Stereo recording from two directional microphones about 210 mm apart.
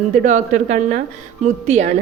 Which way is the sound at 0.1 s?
35° right (ahead or behind).